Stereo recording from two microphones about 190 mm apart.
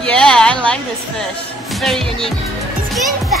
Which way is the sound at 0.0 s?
5° left (ahead or behind).